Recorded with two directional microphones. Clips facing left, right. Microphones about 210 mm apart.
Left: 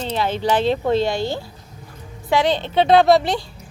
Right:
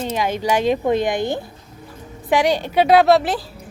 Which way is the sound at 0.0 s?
10° right (ahead or behind).